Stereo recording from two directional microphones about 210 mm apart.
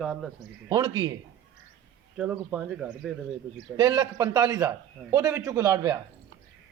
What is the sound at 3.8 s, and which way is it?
A man's voice, 15° right (ahead or behind).